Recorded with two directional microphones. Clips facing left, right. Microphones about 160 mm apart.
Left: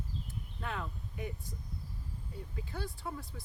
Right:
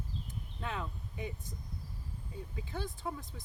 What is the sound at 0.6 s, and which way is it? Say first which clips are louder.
Speech: even; 20° right (ahead or behind).